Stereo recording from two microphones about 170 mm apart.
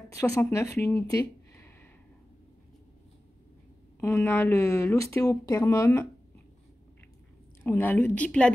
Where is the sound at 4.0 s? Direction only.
15° left (ahead or behind).